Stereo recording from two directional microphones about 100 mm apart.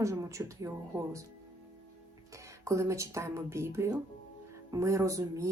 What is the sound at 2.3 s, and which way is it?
Speech, 30° right (ahead or behind).